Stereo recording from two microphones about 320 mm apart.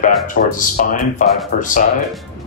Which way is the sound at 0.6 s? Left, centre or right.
Left.